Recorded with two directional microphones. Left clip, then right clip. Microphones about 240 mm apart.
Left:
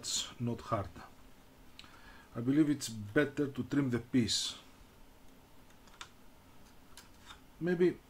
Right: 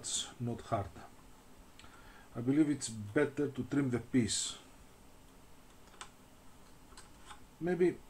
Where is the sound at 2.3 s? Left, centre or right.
Centre.